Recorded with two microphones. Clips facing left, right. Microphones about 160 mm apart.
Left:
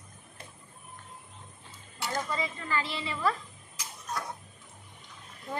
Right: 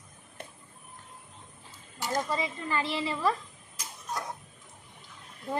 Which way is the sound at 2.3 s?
20° right (ahead or behind).